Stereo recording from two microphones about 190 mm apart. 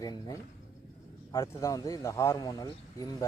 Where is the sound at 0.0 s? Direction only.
20° left (ahead or behind).